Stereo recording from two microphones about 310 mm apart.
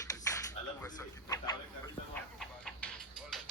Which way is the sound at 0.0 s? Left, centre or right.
Centre.